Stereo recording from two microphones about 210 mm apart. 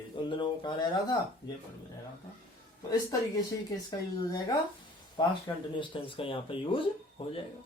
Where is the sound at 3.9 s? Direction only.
20° left (ahead or behind).